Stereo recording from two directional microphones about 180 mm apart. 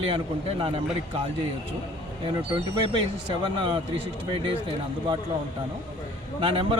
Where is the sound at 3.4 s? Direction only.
25° right (ahead or behind).